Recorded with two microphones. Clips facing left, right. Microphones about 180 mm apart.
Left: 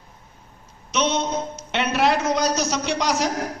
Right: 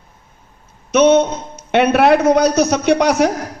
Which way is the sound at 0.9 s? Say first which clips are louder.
Right 12 dB; 55° right (ahead or behind).